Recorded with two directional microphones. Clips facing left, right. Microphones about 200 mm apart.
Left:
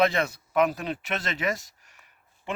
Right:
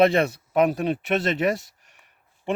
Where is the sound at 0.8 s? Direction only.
55° right (ahead or behind).